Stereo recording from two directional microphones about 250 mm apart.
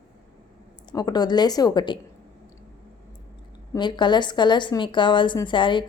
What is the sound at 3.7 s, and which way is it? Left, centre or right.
A woman's voice, centre.